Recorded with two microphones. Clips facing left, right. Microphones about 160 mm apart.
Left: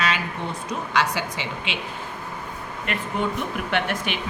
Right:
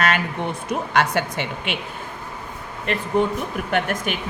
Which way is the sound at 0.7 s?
55° right (ahead or behind).